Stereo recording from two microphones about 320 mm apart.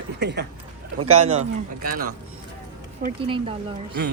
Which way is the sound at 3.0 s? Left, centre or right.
Centre.